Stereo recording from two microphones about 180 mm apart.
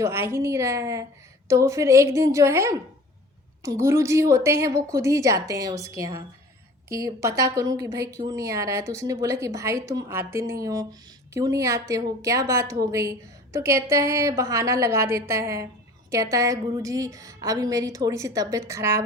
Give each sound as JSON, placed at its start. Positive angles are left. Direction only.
{"t": 0.0, "sound": "a woman's voice", "side_deg": -15}